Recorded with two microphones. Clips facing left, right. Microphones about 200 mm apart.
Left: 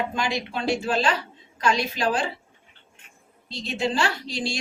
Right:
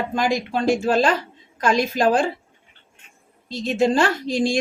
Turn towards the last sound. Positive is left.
turn(degrees=-50)  # may be behind; listen again after turning